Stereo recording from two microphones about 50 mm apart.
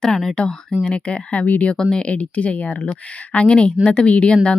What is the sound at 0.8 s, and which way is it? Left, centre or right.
Speech, left.